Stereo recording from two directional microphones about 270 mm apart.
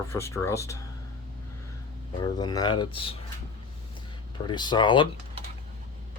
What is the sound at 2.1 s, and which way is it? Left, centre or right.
Speech, centre.